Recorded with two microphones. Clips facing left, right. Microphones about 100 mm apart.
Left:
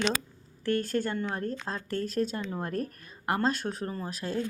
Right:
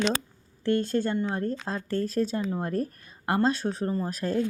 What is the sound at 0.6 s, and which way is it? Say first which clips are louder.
Speech: right 3 dB; 25° right (ahead or behind).